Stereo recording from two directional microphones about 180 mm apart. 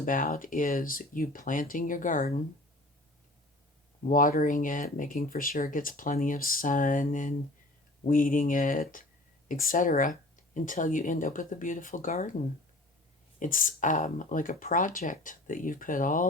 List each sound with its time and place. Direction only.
0.0 s speech: 50° left (ahead or behind)
4.1 s speech: 50° left (ahead or behind)
13.4 s speech: 45° left (ahead or behind)